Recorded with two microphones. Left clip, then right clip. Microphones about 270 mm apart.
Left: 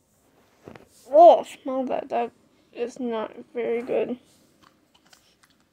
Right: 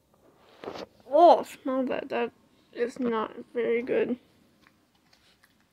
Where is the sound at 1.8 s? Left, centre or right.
Right.